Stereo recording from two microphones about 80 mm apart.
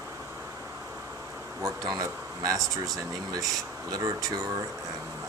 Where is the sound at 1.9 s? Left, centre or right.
Right.